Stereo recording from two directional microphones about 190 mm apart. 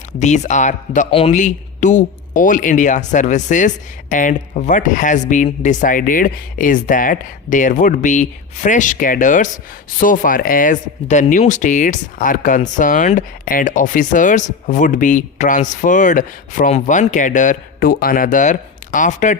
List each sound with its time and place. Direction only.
0.2 s speech: 40° left (ahead or behind)